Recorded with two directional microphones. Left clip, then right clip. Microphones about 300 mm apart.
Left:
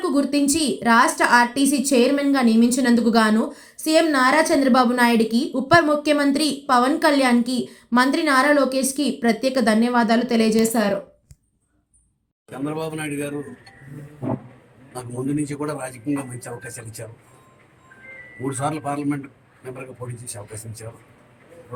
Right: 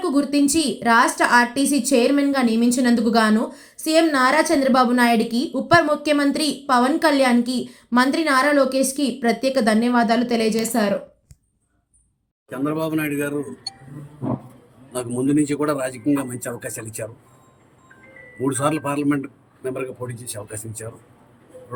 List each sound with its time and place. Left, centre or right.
0.0 s a woman's voice: centre
12.5 s a man's voice: centre
14.9 s a man's voice: centre
18.4 s a man's voice: centre
20.4 s a man's voice: right